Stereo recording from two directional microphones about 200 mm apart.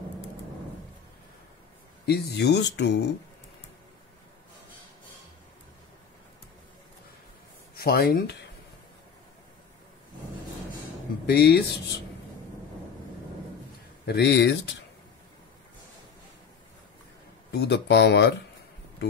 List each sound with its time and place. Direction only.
2.0 s speech: 55° left (ahead or behind)
7.7 s speech: 50° left (ahead or behind)
11.2 s speech: 55° left (ahead or behind)
14.0 s speech: 55° left (ahead or behind)
17.5 s speech: 60° left (ahead or behind)